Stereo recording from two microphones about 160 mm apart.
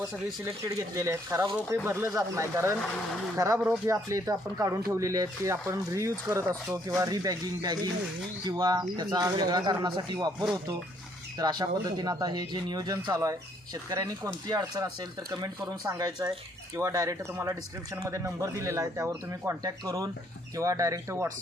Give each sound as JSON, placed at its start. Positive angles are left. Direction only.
{"t": 0.3, "sound": "speech", "side_deg": -20}
{"t": 11.3, "sound": "speech", "side_deg": -25}
{"t": 15.3, "sound": "speech", "side_deg": -20}